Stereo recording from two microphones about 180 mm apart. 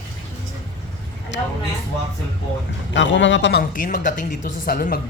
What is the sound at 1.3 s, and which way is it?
Speech, 90° left.